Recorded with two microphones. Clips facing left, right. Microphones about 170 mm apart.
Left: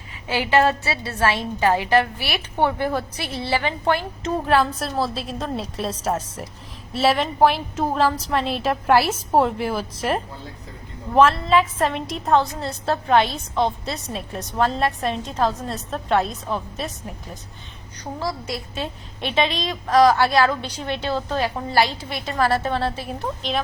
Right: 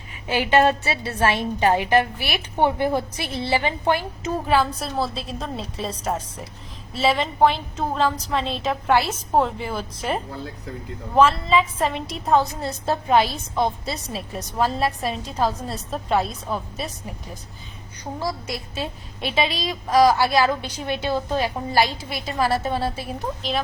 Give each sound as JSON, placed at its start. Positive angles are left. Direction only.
{"t": 0.3, "sound": "a woman's voice", "side_deg": -20}
{"t": 4.2, "sound": "a woman's voice", "side_deg": -5}
{"t": 18.2, "sound": "a woman's voice", "side_deg": -15}